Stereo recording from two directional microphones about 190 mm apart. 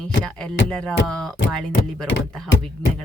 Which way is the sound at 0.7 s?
5° left (ahead or behind).